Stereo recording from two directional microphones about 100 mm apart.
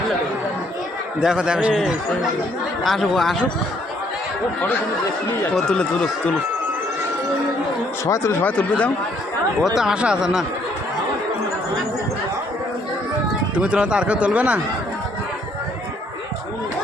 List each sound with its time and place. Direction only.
1.2 s speech: 5° right (ahead or behind)
5.5 s speech: 5° left (ahead or behind)
8.0 s speech: 30° left (ahead or behind); by 8.9 s 15° left (ahead or behind)
9.7 s speech: 5° right (ahead or behind)
13.6 s speech: 10° right (ahead or behind)